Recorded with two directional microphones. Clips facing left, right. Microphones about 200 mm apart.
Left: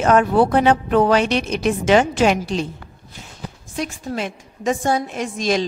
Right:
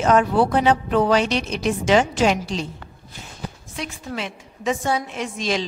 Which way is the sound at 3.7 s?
45° left (ahead or behind).